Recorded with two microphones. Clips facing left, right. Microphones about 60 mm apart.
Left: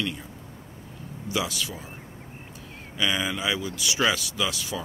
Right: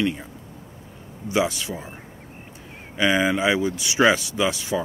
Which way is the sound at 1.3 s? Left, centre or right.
Right.